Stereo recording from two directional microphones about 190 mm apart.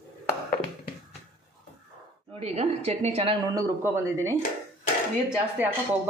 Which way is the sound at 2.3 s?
35° right (ahead or behind).